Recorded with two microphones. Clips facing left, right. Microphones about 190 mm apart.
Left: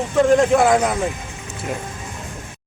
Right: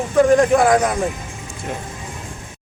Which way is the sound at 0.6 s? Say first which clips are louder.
Right 1 dB; 5° left (ahead or behind).